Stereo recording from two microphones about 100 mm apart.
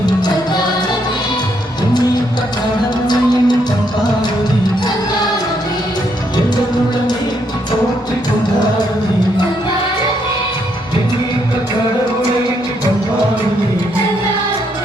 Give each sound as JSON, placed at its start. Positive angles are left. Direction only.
{"t": 0.0, "sound": "music", "side_deg": 45}
{"t": 3.1, "sound": "music", "side_deg": 45}